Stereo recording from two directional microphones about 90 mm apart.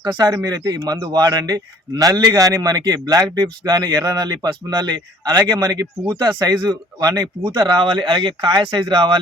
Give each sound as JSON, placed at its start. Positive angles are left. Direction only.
{"t": 0.0, "sound": "a man's voice", "side_deg": -55}
{"t": 7.5, "sound": "speech", "side_deg": -60}